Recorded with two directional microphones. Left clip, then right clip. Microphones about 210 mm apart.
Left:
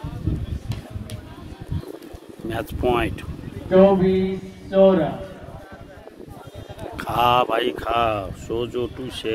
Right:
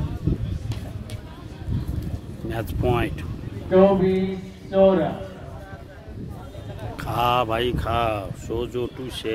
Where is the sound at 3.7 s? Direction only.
50° left (ahead or behind).